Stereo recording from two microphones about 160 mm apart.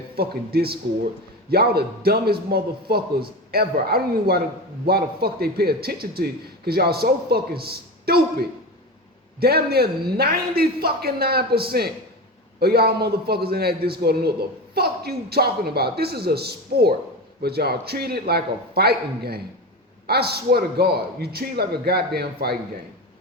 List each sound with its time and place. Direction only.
0.2 s a man's voice: 75° right (ahead or behind)